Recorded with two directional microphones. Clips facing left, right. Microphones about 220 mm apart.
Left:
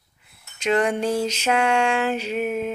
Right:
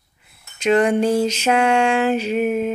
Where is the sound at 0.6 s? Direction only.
25° right (ahead or behind).